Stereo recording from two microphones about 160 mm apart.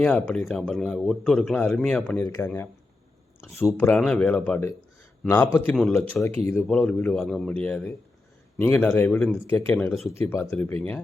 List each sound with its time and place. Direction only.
0.0 s speech: 10° left (ahead or behind)
3.8 s speech: 5° left (ahead or behind)
10.4 s speech: 5° left (ahead or behind)